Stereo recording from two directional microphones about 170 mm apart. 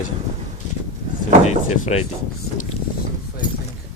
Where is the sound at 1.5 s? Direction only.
40° left (ahead or behind).